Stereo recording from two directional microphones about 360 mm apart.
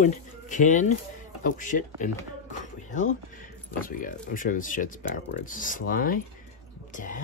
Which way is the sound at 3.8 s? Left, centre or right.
Left.